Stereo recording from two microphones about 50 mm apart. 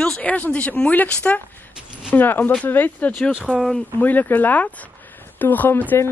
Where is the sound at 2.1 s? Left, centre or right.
Left.